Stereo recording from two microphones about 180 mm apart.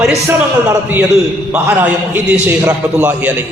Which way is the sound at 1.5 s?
10° right (ahead or behind).